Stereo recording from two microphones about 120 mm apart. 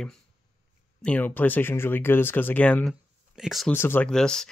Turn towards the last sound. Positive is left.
turn(degrees=5)  # may be behind; listen again after turning